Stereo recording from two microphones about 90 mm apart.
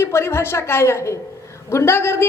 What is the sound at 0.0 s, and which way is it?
Speech, 30° left (ahead or behind).